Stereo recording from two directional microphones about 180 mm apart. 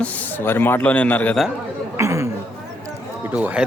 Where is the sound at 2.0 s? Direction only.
15° right (ahead or behind).